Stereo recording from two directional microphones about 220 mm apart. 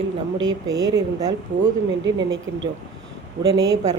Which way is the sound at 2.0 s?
55° right (ahead or behind).